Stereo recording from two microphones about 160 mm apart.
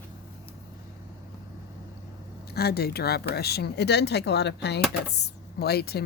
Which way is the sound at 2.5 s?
80° left.